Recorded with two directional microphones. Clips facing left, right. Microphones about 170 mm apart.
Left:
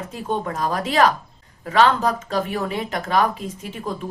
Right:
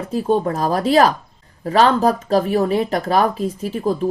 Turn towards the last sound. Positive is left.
turn(degrees=-35)  # may be behind; listen again after turning